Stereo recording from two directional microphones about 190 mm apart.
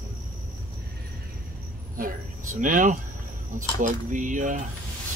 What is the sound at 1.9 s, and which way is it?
Speech, 45° right (ahead or behind).